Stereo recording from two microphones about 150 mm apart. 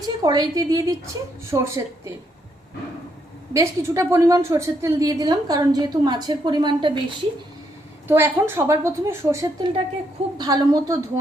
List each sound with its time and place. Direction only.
0.0 s a woman's voice: 25° right (ahead or behind)
3.5 s a woman's voice: 20° right (ahead or behind)
8.0 s a woman's voice: 15° right (ahead or behind)